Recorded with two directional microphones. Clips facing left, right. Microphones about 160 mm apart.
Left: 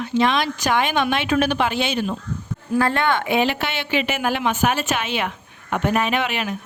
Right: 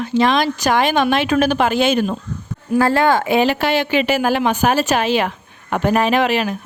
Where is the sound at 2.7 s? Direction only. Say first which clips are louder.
Right 5 dB; 35° right (ahead or behind).